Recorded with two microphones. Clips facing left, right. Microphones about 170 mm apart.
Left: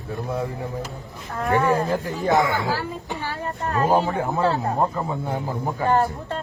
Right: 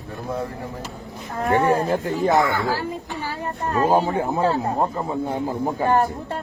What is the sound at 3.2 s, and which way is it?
Speech, 15° right (ahead or behind).